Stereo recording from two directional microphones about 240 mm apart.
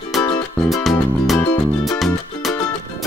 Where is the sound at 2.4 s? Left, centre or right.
Centre.